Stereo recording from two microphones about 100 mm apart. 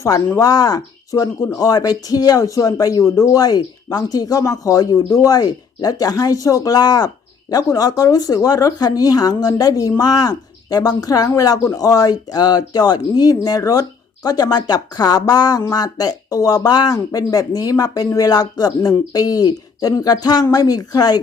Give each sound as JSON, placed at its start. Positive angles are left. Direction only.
{"t": 0.3, "sound": "speech", "side_deg": 40}